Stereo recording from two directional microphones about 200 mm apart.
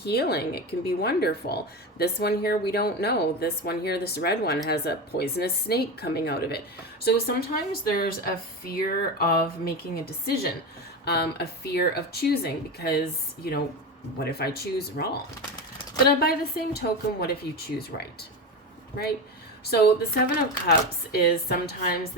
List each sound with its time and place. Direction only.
0.0 s a woman's voice: 55° left (ahead or behind)
19.7 s a woman's voice: 50° left (ahead or behind)